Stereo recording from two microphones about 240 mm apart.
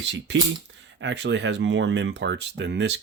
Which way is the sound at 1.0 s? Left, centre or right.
Right.